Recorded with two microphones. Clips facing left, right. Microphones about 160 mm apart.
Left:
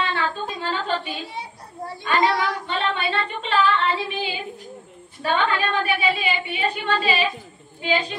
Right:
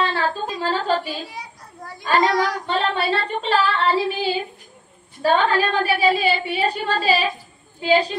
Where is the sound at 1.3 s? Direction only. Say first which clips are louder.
Left 2 dB; 30° left (ahead or behind).